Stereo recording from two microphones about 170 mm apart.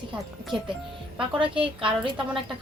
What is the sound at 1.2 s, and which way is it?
Speech, 30° right (ahead or behind).